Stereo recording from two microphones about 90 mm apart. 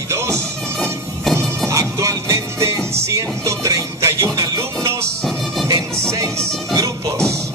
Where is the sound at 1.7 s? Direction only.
35° right (ahead or behind).